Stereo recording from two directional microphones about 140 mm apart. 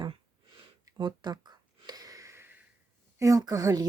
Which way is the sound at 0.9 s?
30° right (ahead or behind).